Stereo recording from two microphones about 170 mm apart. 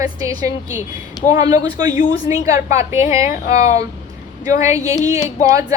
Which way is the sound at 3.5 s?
40° left (ahead or behind).